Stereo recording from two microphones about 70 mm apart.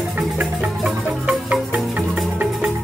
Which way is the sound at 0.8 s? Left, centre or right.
Centre.